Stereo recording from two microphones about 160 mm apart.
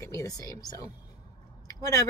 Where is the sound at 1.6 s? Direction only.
20° left (ahead or behind).